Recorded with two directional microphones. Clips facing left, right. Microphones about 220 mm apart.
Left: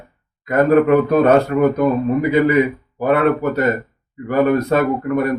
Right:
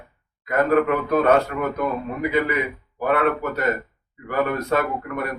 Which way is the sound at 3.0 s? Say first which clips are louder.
Left 6 dB; 35° left (ahead or behind).